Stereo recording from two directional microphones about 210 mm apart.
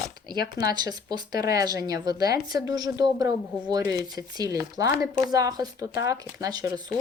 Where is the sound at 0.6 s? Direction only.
20° right (ahead or behind).